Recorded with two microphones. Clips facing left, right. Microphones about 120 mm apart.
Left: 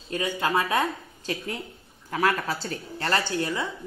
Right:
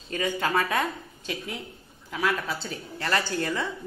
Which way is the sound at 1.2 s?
40° left (ahead or behind).